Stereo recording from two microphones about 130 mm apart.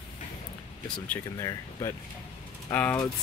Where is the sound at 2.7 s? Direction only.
15° left (ahead or behind).